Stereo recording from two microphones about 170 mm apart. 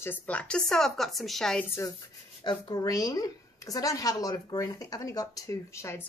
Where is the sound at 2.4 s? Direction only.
25° left (ahead or behind).